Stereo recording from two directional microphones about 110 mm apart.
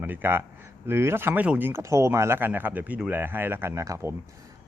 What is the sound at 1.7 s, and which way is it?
Speech, 25° right (ahead or behind).